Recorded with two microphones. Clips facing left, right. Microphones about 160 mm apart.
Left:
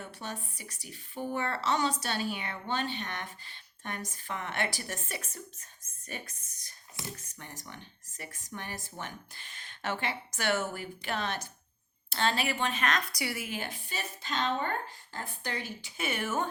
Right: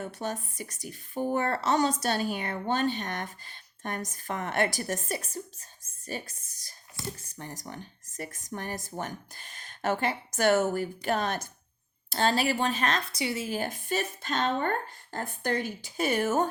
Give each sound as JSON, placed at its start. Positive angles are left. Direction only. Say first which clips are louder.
{"t": 0.0, "sound": "a woman's voice", "louder": "right 7 dB", "side_deg": -45}
{"t": 13.5, "sound": "speech", "louder": "right 8 dB", "side_deg": -45}